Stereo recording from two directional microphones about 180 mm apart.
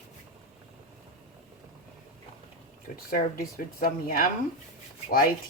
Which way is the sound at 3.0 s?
50° left (ahead or behind).